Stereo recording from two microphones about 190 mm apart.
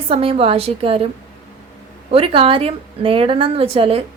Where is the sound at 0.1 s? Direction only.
30° right (ahead or behind).